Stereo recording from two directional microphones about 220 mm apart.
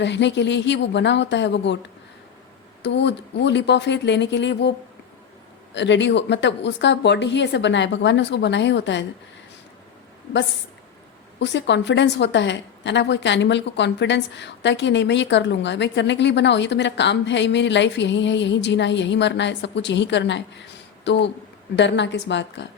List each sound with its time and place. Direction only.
0.0 s a woman's voice: 55° left (ahead or behind)
2.8 s a woman's voice: 50° left (ahead or behind)
5.7 s a woman's voice: 55° left (ahead or behind)
11.3 s a woman's voice: 55° left (ahead or behind)